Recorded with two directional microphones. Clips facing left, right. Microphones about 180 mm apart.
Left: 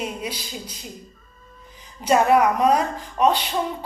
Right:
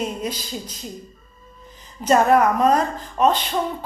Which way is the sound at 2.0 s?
10° left (ahead or behind).